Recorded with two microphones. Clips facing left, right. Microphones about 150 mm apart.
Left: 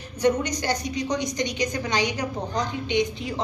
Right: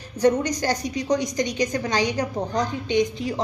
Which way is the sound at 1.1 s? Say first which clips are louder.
Right 6 dB; 40° right (ahead or behind).